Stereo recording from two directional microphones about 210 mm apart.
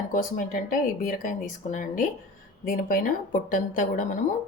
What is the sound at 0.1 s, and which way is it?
Speech, 40° left (ahead or behind).